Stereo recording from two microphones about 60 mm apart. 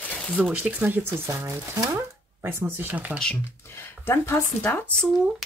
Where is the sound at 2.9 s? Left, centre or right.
Right.